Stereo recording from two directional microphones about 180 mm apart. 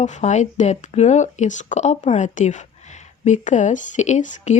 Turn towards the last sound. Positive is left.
turn(degrees=40)  # may be behind; listen again after turning